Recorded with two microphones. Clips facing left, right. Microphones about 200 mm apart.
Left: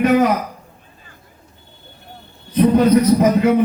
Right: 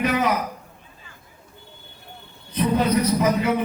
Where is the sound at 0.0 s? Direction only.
55° left (ahead or behind).